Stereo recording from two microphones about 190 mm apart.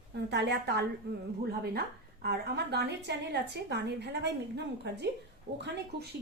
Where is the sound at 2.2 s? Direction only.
60° right (ahead or behind).